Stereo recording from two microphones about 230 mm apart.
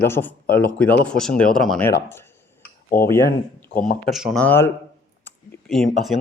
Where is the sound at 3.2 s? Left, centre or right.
Left.